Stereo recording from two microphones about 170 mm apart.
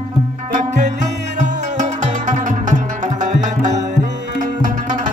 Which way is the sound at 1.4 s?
45° right (ahead or behind).